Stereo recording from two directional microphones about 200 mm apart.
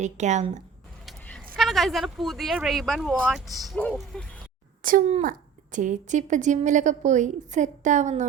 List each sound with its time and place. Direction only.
0.0 s a woman's voice: 35° right (ahead or behind)
1.0 s vehicle: 5° left (ahead or behind)
1.5 s speech: centre (ahead or behind)
4.8 s a child's voice: 45° right (ahead or behind)